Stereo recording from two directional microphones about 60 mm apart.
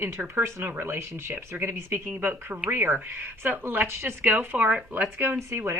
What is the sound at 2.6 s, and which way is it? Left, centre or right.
Speech, right.